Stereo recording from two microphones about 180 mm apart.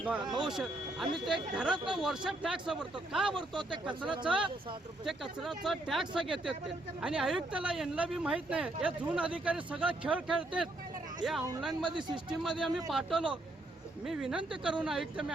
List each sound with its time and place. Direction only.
0.5 s speech: centre (ahead or behind)
1.7 s speech: 25° right (ahead or behind)
2.0 s speech: 5° right (ahead or behind)
3.5 s speech: 25° right (ahead or behind)
4.2 s speech: 5° right (ahead or behind)
11.8 s speech: 25° right (ahead or behind)
12.1 s speech: 5° right (ahead or behind)